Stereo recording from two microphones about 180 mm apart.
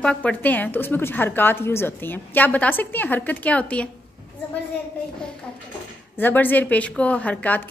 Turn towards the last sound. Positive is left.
turn(degrees=10)  # may be behind; listen again after turning